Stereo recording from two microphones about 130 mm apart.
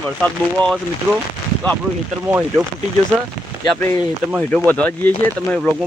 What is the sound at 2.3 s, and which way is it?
Speech, 15° right (ahead or behind).